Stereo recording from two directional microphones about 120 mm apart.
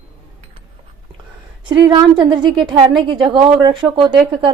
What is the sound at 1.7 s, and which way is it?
A woman's voice, 40° right (ahead or behind).